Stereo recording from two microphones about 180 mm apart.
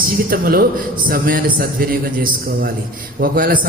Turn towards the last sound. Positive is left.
turn(degrees=-50)  # may be behind; listen again after turning